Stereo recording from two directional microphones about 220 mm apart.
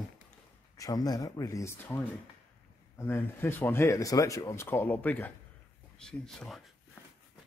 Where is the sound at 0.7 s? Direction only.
15° left (ahead or behind).